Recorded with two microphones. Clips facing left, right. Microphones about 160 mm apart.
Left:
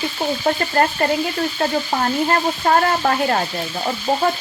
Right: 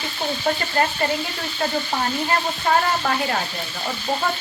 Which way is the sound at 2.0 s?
40° left (ahead or behind).